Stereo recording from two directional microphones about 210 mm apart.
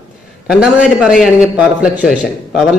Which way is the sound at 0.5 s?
5° right (ahead or behind).